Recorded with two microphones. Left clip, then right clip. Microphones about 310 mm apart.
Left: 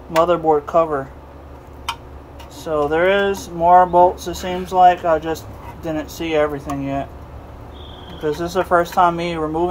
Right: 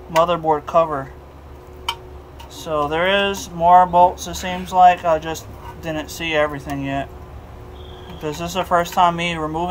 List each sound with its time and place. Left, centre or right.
0.2 s speech: right
2.6 s speech: right
8.2 s speech: right